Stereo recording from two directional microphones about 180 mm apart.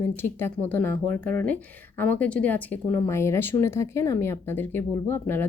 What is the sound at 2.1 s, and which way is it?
Speech, 5° left (ahead or behind).